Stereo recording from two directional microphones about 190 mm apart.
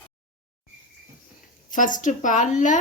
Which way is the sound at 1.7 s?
45° left (ahead or behind).